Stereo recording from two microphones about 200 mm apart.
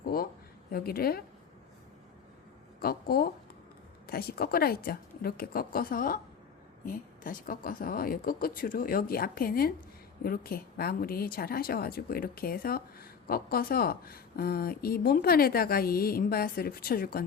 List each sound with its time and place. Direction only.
0.0 s a sound: 50° left (ahead or behind)
0.7 s speech: 50° left (ahead or behind)
2.8 s speech: 50° left (ahead or behind)